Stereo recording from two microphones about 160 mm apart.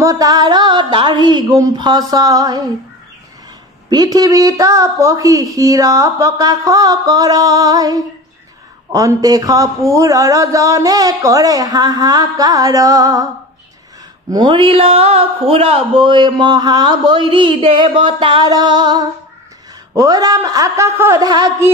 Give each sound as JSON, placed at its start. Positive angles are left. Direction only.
{"t": 0.0, "sound": "speech", "side_deg": -20}
{"t": 3.9, "sound": "speech", "side_deg": -25}
{"t": 14.3, "sound": "speech", "side_deg": -30}